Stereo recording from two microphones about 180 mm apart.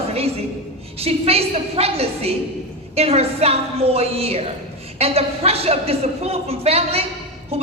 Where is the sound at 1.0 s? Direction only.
35° right (ahead or behind).